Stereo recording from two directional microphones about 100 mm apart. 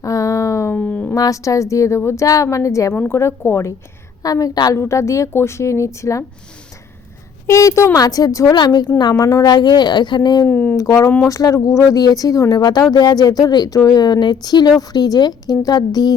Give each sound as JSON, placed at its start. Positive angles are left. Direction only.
{"t": 0.0, "sound": "a sound", "side_deg": 35}
{"t": 0.8, "sound": "a sound", "side_deg": 10}
{"t": 1.1, "sound": "a woman's voice", "side_deg": 35}
{"t": 7.4, "sound": "a woman's voice", "side_deg": 30}
{"t": 8.5, "sound": "a woman's voice", "side_deg": 45}
{"t": 10.4, "sound": "speech", "side_deg": 15}
{"t": 10.8, "sound": "a woman's voice", "side_deg": 35}